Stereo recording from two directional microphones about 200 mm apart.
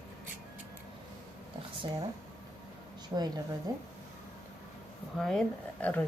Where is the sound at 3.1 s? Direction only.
20° right (ahead or behind).